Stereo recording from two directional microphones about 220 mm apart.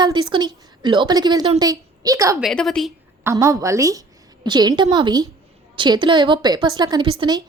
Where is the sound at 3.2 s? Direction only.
15° right (ahead or behind).